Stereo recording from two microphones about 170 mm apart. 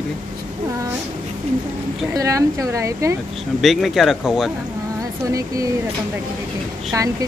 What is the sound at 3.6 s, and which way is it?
Speech, centre (ahead or behind).